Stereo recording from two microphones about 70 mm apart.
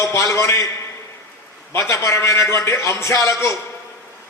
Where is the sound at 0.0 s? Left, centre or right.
Left.